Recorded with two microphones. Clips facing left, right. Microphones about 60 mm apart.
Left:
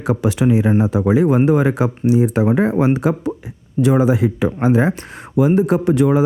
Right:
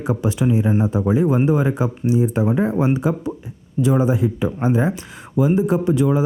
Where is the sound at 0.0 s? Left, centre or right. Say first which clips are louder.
Left 3 dB; left.